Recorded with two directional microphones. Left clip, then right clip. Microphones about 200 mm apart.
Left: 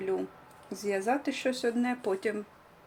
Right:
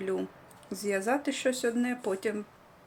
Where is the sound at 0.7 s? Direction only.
10° right (ahead or behind).